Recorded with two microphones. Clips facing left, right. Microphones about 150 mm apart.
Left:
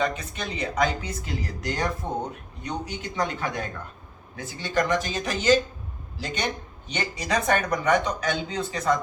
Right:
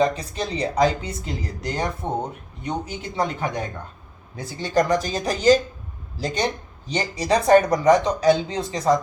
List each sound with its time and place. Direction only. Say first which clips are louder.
0.0 s speech: right 6 dB; 35° right (ahead or behind)
4.4 s speech: right 5 dB; 35° right (ahead or behind)